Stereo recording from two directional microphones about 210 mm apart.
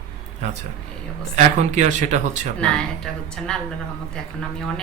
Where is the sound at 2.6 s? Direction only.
5° left (ahead or behind).